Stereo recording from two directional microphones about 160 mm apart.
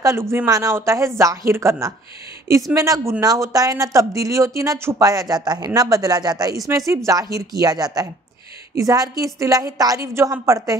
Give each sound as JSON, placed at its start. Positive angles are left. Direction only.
{"t": 0.0, "sound": "speech", "side_deg": -15}